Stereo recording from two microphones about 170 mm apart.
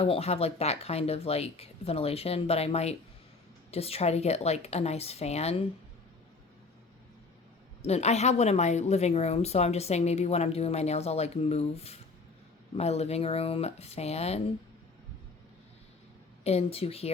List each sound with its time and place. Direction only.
0.0 s a woman's voice: 35° left (ahead or behind)
7.8 s a woman's voice: 40° left (ahead or behind)
16.4 s a woman's voice: 35° left (ahead or behind)